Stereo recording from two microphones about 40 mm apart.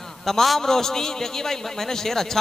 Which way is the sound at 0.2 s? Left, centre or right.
Centre.